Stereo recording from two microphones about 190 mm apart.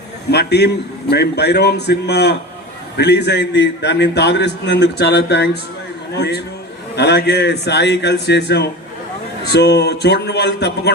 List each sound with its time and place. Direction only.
0.3 s a man's voice: 60° left (ahead or behind)